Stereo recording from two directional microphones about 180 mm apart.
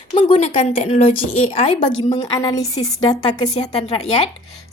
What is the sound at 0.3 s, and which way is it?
Speech, 40° left (ahead or behind).